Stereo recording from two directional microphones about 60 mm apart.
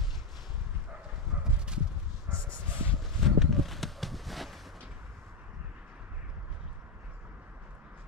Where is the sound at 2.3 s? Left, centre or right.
Right.